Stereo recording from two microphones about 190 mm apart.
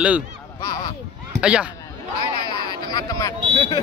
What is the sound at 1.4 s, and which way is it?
Speech, 5° right (ahead or behind).